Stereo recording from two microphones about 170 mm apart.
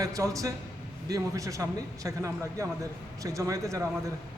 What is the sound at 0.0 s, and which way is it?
A man's voice, 20° right (ahead or behind).